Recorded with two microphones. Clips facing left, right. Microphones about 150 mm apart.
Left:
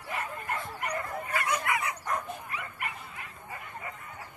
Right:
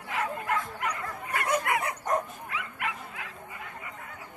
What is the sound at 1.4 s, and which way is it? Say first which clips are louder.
Dog: right 5 dB; 50° right (ahead or behind).